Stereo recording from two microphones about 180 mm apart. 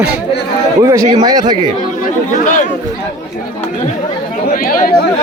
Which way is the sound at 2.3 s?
45° left (ahead or behind).